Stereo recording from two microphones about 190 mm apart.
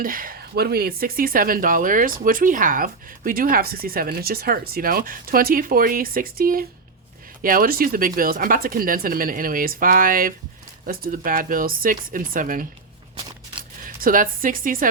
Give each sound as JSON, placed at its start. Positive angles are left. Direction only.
{"t": 0.0, "sound": "speech", "side_deg": -50}
{"t": 13.8, "sound": "speech", "side_deg": -45}